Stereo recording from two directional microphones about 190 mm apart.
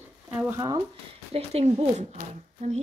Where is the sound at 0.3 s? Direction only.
10° right (ahead or behind).